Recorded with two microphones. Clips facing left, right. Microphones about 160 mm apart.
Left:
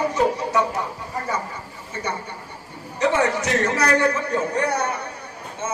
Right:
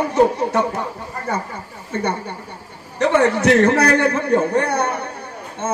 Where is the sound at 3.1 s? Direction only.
60° right (ahead or behind).